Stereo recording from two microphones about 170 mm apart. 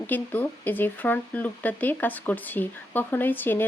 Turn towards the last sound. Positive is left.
turn(degrees=10)  # may be behind; listen again after turning